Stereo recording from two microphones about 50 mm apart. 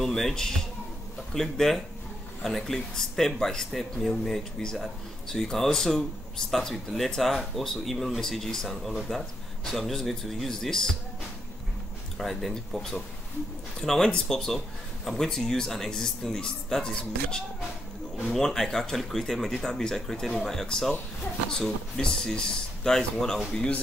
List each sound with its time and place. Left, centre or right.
0.0 s speech: centre
12.2 s speech: centre
18.1 s speech: centre